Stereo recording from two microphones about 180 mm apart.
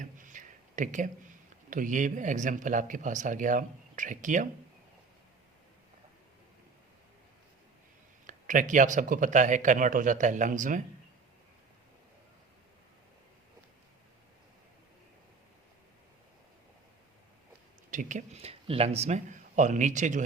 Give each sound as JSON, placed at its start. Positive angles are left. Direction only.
{"t": 0.0, "sound": "a sound", "side_deg": -45}
{"t": 1.7, "sound": "speech", "side_deg": -45}
{"t": 8.3, "sound": "speech", "side_deg": -45}
{"t": 17.9, "sound": "speech", "side_deg": -45}